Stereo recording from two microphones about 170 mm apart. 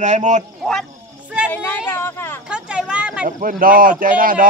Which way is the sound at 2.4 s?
5° right (ahead or behind).